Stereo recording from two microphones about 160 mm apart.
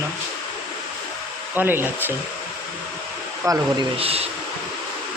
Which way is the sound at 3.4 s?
20° right (ahead or behind).